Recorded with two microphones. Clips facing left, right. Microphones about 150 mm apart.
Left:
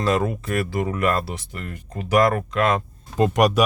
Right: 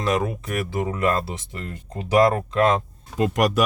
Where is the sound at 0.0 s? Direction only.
15° right (ahead or behind).